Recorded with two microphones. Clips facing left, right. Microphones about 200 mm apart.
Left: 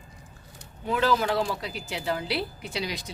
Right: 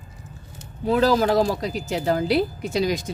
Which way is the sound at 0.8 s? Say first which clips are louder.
Right 6 dB; 40° right (ahead or behind).